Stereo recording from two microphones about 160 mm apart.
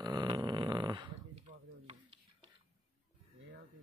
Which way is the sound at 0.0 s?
25° right (ahead or behind).